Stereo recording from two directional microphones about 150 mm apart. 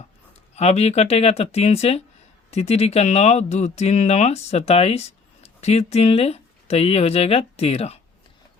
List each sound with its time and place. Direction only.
0.5 s speech: 45° left (ahead or behind)